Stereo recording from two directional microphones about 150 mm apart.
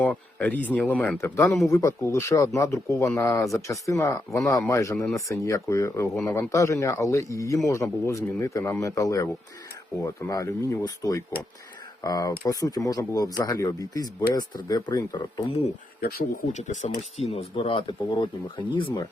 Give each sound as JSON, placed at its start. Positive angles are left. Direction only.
{"t": 0.0, "sound": "speech", "side_deg": 10}
{"t": 16.0, "sound": "speech", "side_deg": 90}
{"t": 16.5, "sound": "speech", "side_deg": 55}